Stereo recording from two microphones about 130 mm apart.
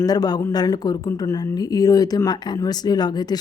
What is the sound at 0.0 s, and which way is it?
Speech, 30° left (ahead or behind).